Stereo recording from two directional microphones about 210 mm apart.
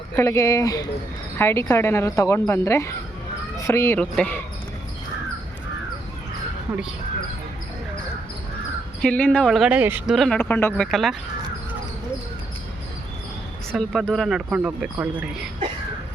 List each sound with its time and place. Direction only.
0.2 s speech: 15° left (ahead or behind)
9.0 s speech: 5° left (ahead or behind)
13.7 s speech: centre (ahead or behind)